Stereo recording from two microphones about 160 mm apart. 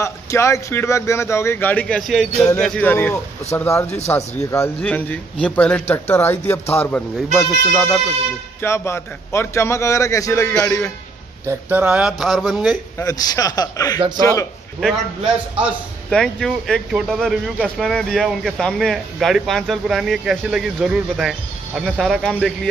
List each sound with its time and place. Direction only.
0.0 s speech: 20° left (ahead or behind)
7.3 s speech: centre (ahead or behind)
8.5 s speech: 15° left (ahead or behind)
11.4 s speech: 10° right (ahead or behind)
13.0 s a man's voice: 25° left (ahead or behind)
14.8 s speech: 5° right (ahead or behind)